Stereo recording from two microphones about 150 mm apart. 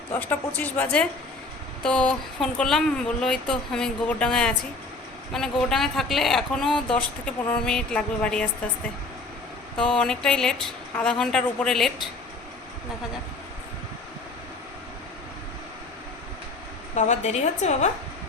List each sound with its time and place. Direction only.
0.1 s a woman's voice: 10° left (ahead or behind)
9.7 s speech: 5° left (ahead or behind)
16.9 s a woman's voice: 55° left (ahead or behind)